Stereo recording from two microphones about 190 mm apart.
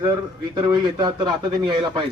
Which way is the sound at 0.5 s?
20° right (ahead or behind).